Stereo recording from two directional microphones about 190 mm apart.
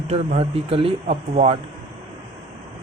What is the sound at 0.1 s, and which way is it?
Speech, 30° right (ahead or behind).